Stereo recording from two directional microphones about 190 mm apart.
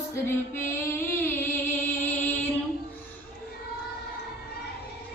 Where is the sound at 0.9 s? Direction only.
10° left (ahead or behind).